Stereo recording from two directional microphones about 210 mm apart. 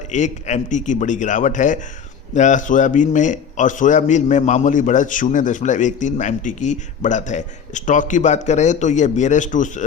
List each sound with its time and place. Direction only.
0.1 s a man's voice: 35° left (ahead or behind)